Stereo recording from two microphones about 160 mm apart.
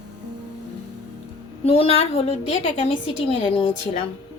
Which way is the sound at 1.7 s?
40° left (ahead or behind).